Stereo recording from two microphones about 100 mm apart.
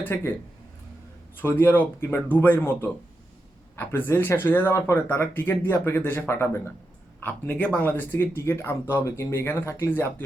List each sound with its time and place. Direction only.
0.0 s speech: 20° left (ahead or behind)
1.4 s speech: 20° left (ahead or behind)
3.8 s speech: 20° left (ahead or behind)